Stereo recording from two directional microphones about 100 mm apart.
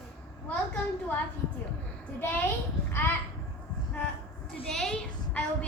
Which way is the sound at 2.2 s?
15° left (ahead or behind).